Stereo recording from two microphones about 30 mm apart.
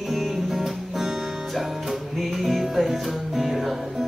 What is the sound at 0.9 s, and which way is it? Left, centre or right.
Music, centre.